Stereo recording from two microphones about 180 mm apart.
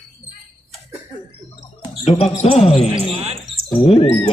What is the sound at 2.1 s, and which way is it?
Speech, 35° left (ahead or behind).